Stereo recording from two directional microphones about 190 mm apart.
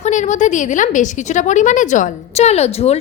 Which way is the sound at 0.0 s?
40° left (ahead or behind).